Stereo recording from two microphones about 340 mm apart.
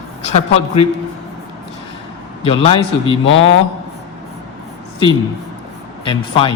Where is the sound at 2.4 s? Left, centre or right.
Centre.